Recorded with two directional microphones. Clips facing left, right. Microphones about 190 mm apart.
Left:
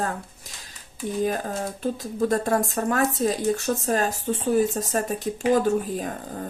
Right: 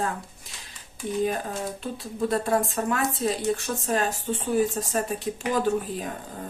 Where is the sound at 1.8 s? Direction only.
45° left (ahead or behind).